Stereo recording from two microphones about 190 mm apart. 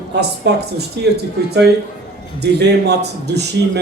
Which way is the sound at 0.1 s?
60° right (ahead or behind).